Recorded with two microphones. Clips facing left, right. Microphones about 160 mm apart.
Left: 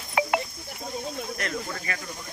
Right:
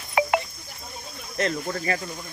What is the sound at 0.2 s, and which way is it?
Cricket, centre (ahead or behind).